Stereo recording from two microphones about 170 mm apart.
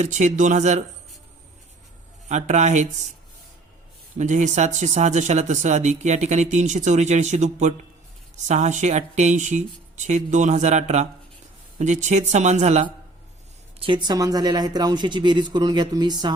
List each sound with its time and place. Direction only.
0.0 s speech: 45° right (ahead or behind)
2.3 s speech: 45° right (ahead or behind)
4.2 s speech: 45° right (ahead or behind)
13.7 s speech: 30° right (ahead or behind)